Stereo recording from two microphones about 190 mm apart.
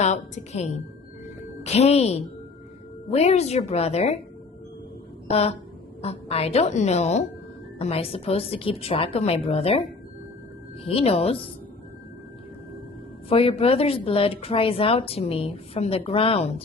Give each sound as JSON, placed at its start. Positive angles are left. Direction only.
{"t": 0.0, "sound": "a woman's voice", "side_deg": 40}
{"t": 5.3, "sound": "a woman's voice", "side_deg": 35}
{"t": 10.8, "sound": "a woman's voice", "side_deg": 30}
{"t": 13.2, "sound": "a woman's voice", "side_deg": 30}